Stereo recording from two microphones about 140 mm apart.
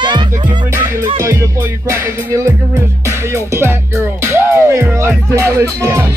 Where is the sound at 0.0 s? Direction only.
30° right (ahead or behind).